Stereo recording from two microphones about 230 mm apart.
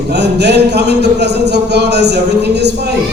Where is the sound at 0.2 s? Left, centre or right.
Right.